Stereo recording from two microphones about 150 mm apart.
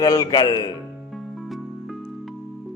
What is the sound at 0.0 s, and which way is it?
Speech, 25° left (ahead or behind).